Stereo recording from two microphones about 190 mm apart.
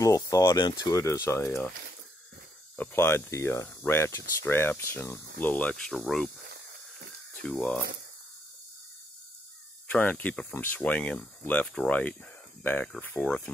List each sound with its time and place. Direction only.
0.0 s speech: 15° left (ahead or behind)
2.7 s speech: 10° left (ahead or behind)
7.4 s speech: 5° left (ahead or behind)
9.8 s speech: 10° left (ahead or behind)